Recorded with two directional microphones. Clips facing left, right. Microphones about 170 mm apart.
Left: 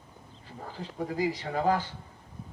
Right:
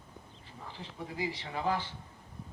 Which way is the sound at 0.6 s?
45° left (ahead or behind).